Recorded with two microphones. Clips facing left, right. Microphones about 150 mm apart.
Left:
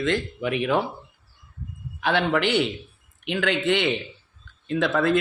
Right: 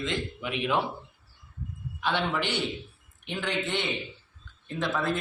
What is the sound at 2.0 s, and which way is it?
Speech, 80° left.